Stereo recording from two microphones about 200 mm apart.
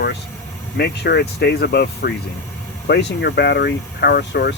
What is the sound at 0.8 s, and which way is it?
Speech, 55° left (ahead or behind).